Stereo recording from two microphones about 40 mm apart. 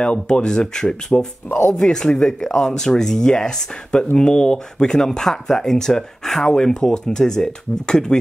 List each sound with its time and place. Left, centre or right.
0.0 s speech: left